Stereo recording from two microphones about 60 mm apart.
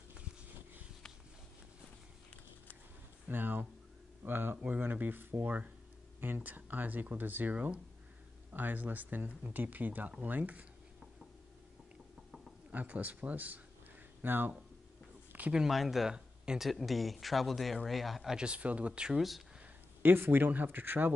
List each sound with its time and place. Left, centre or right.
3.3 s speech: right
12.7 s speech: right
15.5 s speech: centre
18.4 s speech: right
19.1 s speech: centre
20.0 s speech: right